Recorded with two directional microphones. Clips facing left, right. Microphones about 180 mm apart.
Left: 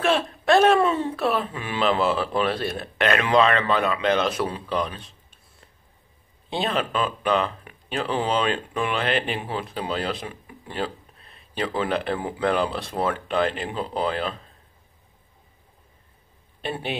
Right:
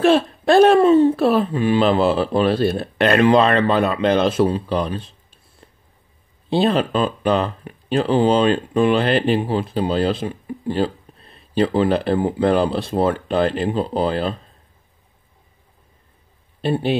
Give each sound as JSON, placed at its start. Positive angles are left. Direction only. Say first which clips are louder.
{"t": 0.0, "sound": "speech", "louder": "right 7 dB", "side_deg": -35}
{"t": 6.5, "sound": "speech", "louder": "right 8 dB", "side_deg": -35}
{"t": 16.6, "sound": "speech", "louder": "right 10 dB", "side_deg": -35}